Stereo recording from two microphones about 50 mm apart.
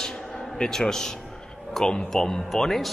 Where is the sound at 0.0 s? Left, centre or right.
Centre.